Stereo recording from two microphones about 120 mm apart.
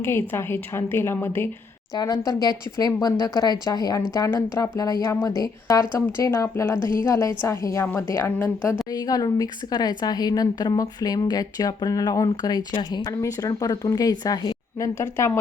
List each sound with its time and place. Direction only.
0.0 s a woman's voice: 20° left (ahead or behind)
2.0 s a woman's voice: 30° left (ahead or behind)
8.9 s a woman's voice: 30° left (ahead or behind)